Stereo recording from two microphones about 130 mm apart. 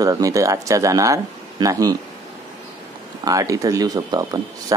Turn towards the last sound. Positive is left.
turn(degrees=-25)  # may be behind; listen again after turning